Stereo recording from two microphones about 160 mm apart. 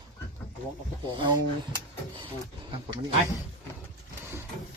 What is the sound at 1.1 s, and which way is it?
Speech, 30° right (ahead or behind).